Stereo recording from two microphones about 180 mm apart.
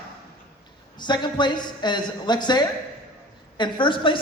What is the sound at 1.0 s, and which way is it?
A woman's voice, 25° left (ahead or behind).